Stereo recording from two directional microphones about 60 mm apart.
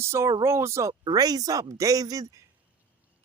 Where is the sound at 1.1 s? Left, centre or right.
Right.